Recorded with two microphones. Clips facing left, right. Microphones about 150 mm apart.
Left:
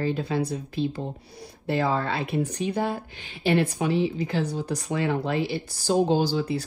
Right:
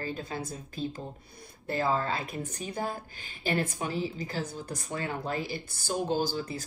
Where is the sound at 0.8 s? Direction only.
45° right (ahead or behind).